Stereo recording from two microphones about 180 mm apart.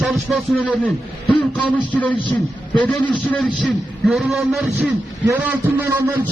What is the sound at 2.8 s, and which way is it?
A man's voice, 10° left (ahead or behind).